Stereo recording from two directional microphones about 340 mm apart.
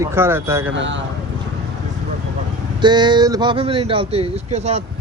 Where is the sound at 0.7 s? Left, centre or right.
Right.